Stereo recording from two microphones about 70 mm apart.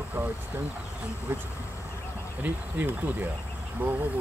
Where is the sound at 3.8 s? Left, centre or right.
Right.